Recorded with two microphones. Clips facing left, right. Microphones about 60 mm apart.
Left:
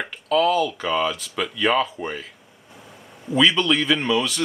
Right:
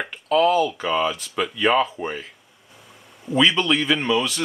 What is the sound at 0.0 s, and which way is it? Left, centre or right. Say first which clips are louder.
A man's voice: right 1 dB; centre.